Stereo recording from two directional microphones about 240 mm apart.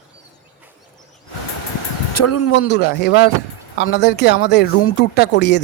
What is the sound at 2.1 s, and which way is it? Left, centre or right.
Speech, left.